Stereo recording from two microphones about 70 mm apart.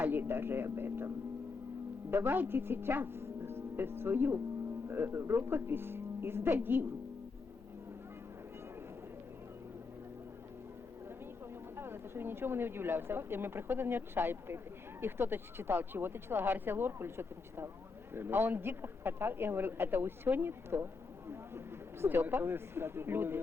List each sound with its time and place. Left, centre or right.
0.0 s a woman's voice: right
11.8 s a man's voice: right